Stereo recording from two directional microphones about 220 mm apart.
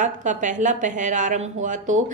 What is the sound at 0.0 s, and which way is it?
Speech, 35° right (ahead or behind).